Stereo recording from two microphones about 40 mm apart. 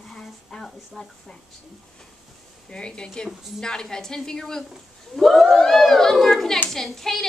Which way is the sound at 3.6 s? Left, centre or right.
Centre.